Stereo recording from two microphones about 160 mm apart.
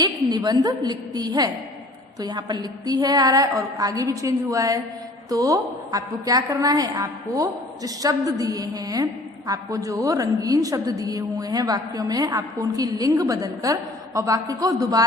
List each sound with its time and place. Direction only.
0.0 s a woman's voice: 25° right (ahead or behind)